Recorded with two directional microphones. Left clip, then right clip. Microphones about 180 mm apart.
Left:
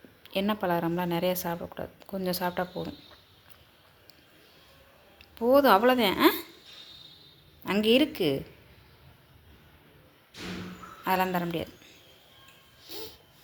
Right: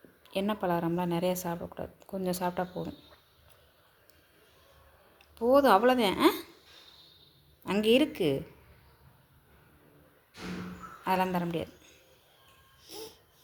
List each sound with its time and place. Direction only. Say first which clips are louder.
0.2 s speech: left 2 dB; centre (ahead or behind)
5.3 s speech: left 2 dB; centre (ahead or behind)
7.6 s speech: left 2 dB; centre (ahead or behind)
11.0 s a woman's voice: left 2 dB; centre (ahead or behind)
12.8 s a sound: left 3 dB; centre (ahead or behind)